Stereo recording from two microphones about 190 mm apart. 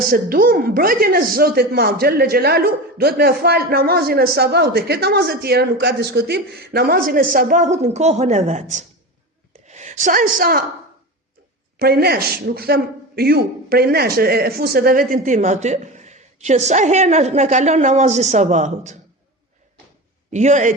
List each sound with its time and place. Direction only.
0.1 s a woman's voice: 50° right (ahead or behind)
11.8 s a man's voice: 55° right (ahead or behind); by 18.9 s 40° right (ahead or behind)
20.3 s a man's voice: 40° right (ahead or behind)